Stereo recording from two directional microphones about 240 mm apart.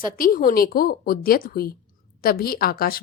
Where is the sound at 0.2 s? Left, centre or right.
Left.